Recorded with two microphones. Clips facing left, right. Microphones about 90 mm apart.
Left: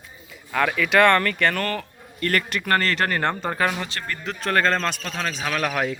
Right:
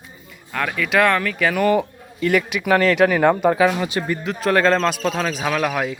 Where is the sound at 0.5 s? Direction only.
Centre (ahead or behind).